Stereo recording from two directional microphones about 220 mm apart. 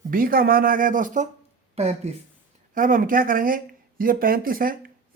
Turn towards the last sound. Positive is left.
turn(degrees=-40)  # may be behind; listen again after turning